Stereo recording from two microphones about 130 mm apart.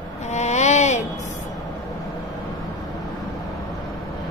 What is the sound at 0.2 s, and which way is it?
Music, 60° left (ahead or behind).